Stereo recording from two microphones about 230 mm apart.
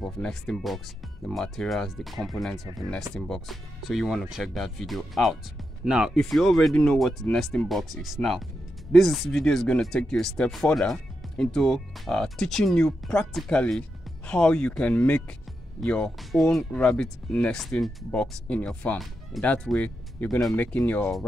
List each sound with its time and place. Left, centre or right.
0.0 s speech: centre